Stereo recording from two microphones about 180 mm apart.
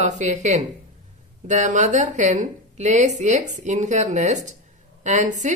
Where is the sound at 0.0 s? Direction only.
40° right (ahead or behind).